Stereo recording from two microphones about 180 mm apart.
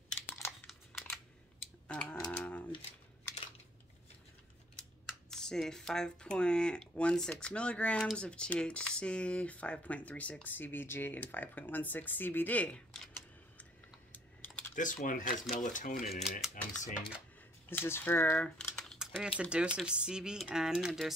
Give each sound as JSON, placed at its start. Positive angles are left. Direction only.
{"t": 0.5, "sound": "computer keyboard", "side_deg": 0}
{"t": 1.9, "sound": "a sound", "side_deg": 5}
{"t": 5.3, "sound": "speech", "side_deg": 5}
{"t": 14.1, "sound": "typing", "side_deg": 10}
{"t": 14.8, "sound": "speech", "side_deg": 45}
{"t": 16.2, "sound": "speech", "side_deg": 0}
{"t": 16.7, "sound": "speech", "side_deg": 45}
{"t": 17.6, "sound": "speech", "side_deg": 15}